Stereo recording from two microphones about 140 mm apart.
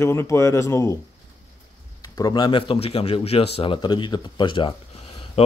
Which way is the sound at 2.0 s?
25° left (ahead or behind).